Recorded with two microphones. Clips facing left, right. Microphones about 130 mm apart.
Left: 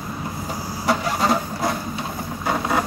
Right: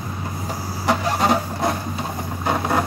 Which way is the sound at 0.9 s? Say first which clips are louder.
Right 1 dB; 20° right (ahead or behind).